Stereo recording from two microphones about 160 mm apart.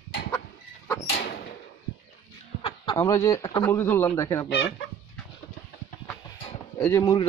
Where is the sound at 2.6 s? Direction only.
30° left (ahead or behind).